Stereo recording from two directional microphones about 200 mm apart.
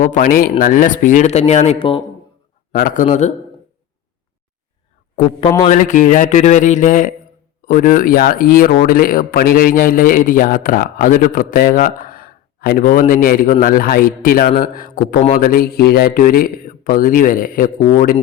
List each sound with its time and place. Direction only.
0.0 s speech: 45° left (ahead or behind)
2.7 s speech: 40° left (ahead or behind)
5.6 s speech: 40° left (ahead or behind)